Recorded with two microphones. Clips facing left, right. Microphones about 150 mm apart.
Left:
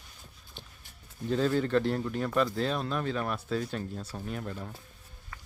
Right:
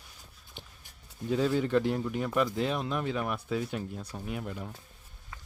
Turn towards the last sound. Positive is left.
turn(degrees=-10)  # may be behind; listen again after turning